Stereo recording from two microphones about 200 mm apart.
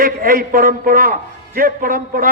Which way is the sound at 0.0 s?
45° right (ahead or behind).